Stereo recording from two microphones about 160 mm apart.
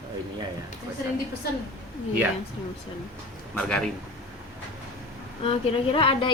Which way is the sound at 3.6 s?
5° left (ahead or behind).